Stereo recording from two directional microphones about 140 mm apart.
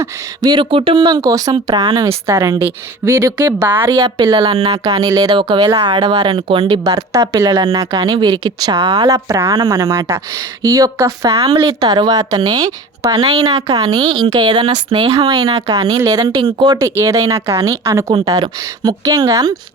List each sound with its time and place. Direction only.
0.0 s speech: 30° right (ahead or behind)
2.2 s speech: 20° right (ahead or behind)
5.7 s speech: 45° right (ahead or behind); by 14.7 s 30° right (ahead or behind)
14.9 s speech: 40° right (ahead or behind)
15.3 s speech: 25° right (ahead or behind)
17.0 s speech: 20° right (ahead or behind)